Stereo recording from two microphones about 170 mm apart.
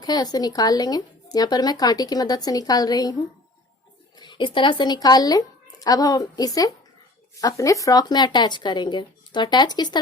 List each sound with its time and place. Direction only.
0.0 s speech: 25° left (ahead or behind)
4.2 s speech: 25° left (ahead or behind)